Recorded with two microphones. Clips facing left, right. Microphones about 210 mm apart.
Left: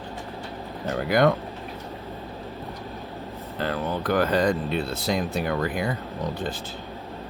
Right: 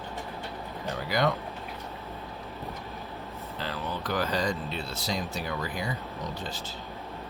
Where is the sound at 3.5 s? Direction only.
55° left (ahead or behind).